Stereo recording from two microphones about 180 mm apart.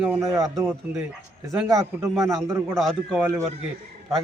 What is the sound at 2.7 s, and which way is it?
Speech, centre (ahead or behind).